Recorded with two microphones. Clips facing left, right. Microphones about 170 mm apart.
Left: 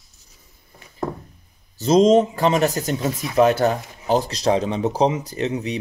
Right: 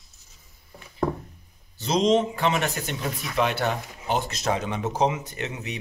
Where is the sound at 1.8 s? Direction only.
45° left (ahead or behind).